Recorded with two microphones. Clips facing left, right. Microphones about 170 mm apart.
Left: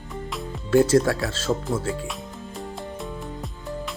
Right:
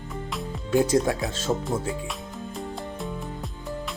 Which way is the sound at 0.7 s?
15° right (ahead or behind).